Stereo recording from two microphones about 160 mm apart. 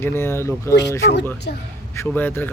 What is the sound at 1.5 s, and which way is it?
Speech, 90° left.